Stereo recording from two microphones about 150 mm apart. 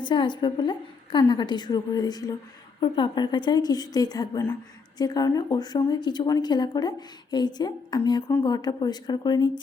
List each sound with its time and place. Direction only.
0.0 s a woman's voice: 30° left (ahead or behind)